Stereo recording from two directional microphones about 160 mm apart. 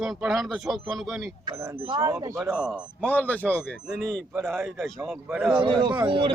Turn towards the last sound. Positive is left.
turn(degrees=-30)  # may be behind; listen again after turning